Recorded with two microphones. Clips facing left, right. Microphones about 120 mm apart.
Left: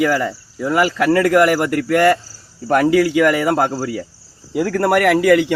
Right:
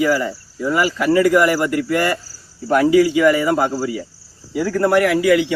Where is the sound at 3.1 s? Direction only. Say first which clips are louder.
Even; 70° left (ahead or behind).